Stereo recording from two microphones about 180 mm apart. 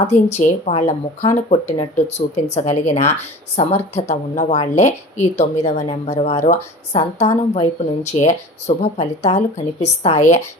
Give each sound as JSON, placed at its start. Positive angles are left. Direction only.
{"t": 0.1, "sound": "speech", "side_deg": 40}